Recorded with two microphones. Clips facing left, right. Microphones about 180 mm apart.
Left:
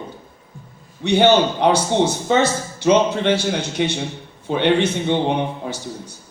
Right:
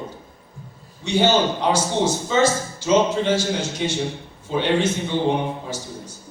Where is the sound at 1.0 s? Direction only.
65° left (ahead or behind).